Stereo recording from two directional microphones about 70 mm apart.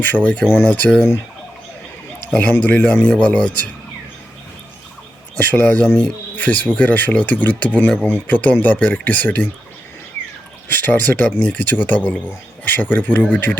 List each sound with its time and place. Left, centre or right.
0.0 s speech: left
2.4 s speech: left
5.4 s speech: left
10.7 s speech: left